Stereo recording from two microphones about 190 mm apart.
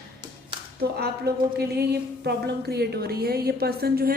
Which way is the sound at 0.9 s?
55° right (ahead or behind).